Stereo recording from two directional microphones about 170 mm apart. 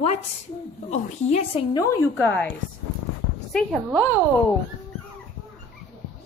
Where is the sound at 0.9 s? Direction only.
40° left (ahead or behind).